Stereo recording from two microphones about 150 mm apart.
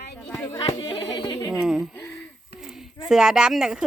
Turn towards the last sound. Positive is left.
turn(degrees=-5)  # may be behind; listen again after turning